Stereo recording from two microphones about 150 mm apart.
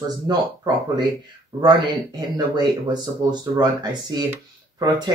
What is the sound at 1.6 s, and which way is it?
Speech, 30° right (ahead or behind).